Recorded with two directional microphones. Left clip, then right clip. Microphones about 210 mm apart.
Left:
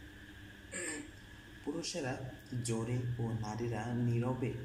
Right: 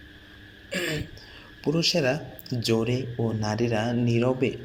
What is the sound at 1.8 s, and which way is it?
Speech, 40° right (ahead or behind).